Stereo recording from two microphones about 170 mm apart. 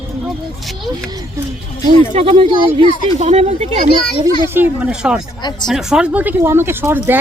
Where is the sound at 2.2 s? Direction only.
35° right (ahead or behind).